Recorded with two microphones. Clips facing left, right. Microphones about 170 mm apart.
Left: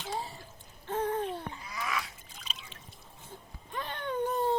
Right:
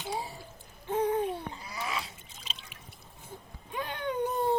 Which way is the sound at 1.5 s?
30° right (ahead or behind).